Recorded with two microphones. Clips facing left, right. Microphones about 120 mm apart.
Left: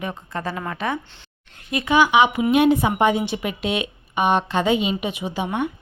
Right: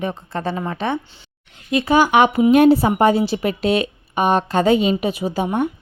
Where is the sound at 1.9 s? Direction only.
45° right (ahead or behind).